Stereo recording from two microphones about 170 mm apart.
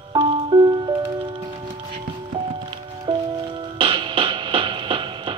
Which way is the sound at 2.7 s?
30° right (ahead or behind).